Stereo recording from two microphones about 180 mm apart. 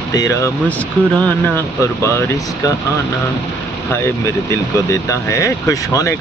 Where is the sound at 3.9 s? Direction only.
15° left (ahead or behind).